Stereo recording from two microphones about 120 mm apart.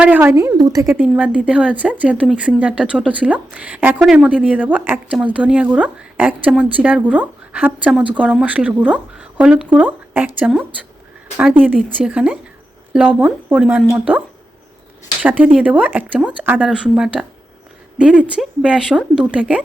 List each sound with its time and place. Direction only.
0.0 s speech: 15° right (ahead or behind)
0.3 s a woman's voice: 30° right (ahead or behind)
0.9 s speech: 10° right (ahead or behind)
11.9 s speech: 10° right (ahead or behind)
15.2 s speech: 15° right (ahead or behind)